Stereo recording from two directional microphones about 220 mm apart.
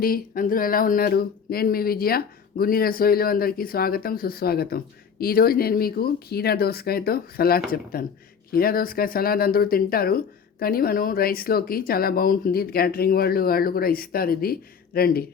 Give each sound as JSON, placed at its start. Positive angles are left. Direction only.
{"t": 0.0, "sound": "speech", "side_deg": 40}